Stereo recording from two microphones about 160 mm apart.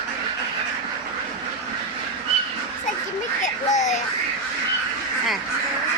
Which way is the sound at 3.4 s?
50° left (ahead or behind).